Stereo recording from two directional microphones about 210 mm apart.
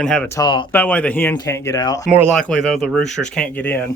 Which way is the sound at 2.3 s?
5° left (ahead or behind).